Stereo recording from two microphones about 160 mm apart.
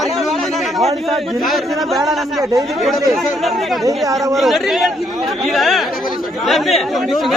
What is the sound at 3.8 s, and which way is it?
Speech, 20° right (ahead or behind).